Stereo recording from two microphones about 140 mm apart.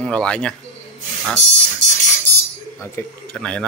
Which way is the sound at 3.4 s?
5° left (ahead or behind).